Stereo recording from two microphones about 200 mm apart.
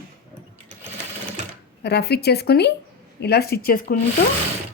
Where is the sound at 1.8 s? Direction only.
55° left (ahead or behind).